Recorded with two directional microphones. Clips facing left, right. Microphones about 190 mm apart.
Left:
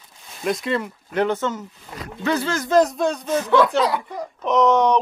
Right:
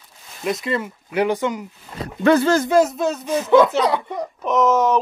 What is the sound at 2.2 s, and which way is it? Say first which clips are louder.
Speech: right 8 dB; 50° right (ahead or behind).